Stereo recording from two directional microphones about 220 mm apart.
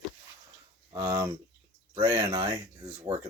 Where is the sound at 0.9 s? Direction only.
15° right (ahead or behind).